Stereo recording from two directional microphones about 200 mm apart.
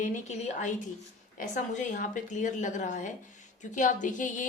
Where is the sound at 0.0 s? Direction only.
35° left (ahead or behind).